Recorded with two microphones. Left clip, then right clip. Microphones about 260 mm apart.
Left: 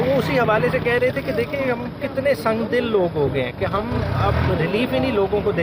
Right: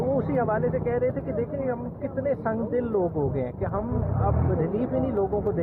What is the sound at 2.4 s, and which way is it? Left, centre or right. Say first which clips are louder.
Speech: left 7 dB; left.